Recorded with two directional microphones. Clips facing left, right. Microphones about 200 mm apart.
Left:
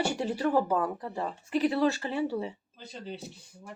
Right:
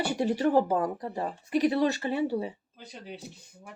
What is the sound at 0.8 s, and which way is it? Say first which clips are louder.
Speech: right 1 dB; 35° right (ahead or behind).